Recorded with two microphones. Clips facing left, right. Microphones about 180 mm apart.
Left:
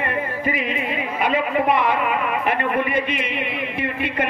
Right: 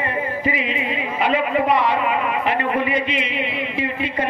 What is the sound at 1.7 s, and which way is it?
A man's voice, 50° left (ahead or behind).